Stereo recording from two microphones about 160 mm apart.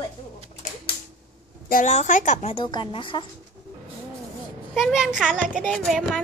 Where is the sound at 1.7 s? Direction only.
50° left (ahead or behind).